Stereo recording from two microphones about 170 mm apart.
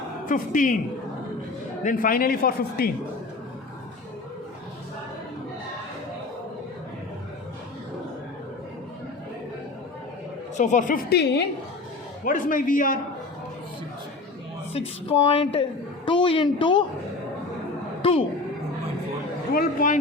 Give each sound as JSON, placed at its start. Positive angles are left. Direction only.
{"t": 0.3, "sound": "a man's voice", "side_deg": 50}
{"t": 1.8, "sound": "speech", "side_deg": 55}
{"t": 10.6, "sound": "a man's voice", "side_deg": 45}
{"t": 11.1, "sound": "a woman's voice", "side_deg": 80}
{"t": 12.2, "sound": "a man's voice", "side_deg": 50}
{"t": 14.7, "sound": "speech", "side_deg": 35}
{"t": 18.0, "sound": "a sound", "side_deg": 30}
{"t": 19.5, "sound": "a man's voice", "side_deg": 50}